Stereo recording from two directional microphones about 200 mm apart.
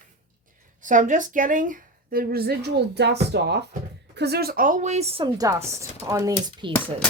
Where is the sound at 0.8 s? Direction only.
40° right (ahead or behind); by 6.3 s 15° right (ahead or behind).